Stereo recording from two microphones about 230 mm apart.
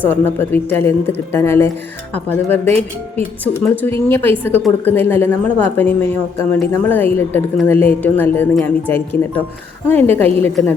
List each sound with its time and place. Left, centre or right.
0.0 s a woman's voice: centre
2.6 s speech: right
3.4 s a woman's voice: centre